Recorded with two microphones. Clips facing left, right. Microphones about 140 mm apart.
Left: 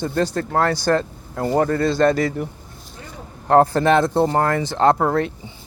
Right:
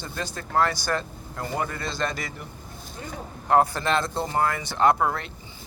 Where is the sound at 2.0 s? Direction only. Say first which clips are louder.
Left 14 dB; 30° left (ahead or behind).